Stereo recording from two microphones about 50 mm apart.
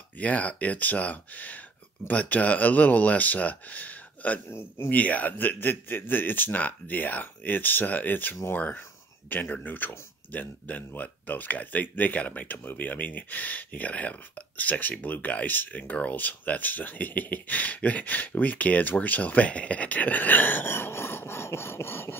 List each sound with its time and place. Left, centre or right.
0.2 s speech: left
4.5 s a man's voice: left
4.8 s speech: left